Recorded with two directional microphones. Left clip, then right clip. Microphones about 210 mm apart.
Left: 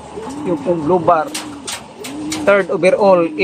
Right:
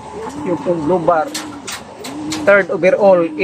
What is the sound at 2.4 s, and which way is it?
Speech, 15° left (ahead or behind).